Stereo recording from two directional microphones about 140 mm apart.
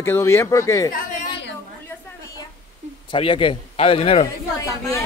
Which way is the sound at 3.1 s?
40° left (ahead or behind).